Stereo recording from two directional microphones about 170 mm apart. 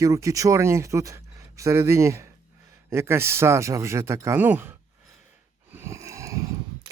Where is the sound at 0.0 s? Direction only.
20° right (ahead or behind).